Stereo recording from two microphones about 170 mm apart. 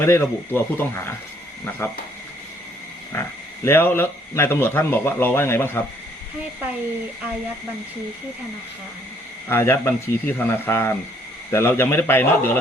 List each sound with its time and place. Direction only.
0.0 s speech: 15° left (ahead or behind)
3.1 s speech: 15° left (ahead or behind)
9.5 s speech: 15° left (ahead or behind)